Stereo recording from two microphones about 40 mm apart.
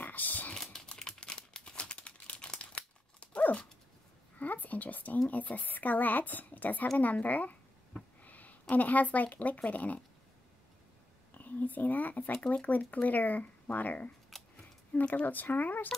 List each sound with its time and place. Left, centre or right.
0.0 s typing: left
0.7 s crumpling: left
2.6 s dog: left
4.4 s a sound: left
5.3 s a woman's voice: left
11.3 s a woman's voice: left